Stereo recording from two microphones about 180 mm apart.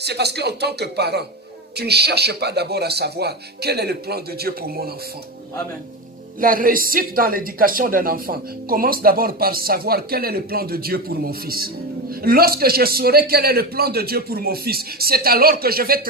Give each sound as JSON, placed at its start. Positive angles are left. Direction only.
{"t": 0.0, "sound": "speech", "side_deg": -65}
{"t": 6.4, "sound": "speech", "side_deg": -50}